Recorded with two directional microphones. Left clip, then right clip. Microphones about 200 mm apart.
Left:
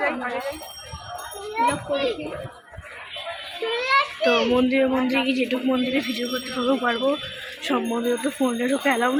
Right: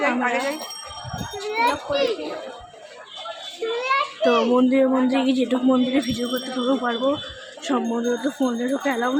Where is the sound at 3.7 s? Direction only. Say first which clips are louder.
Left 2 dB; 35° left (ahead or behind).